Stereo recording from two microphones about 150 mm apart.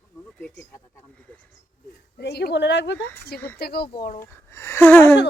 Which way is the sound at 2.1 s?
90° left.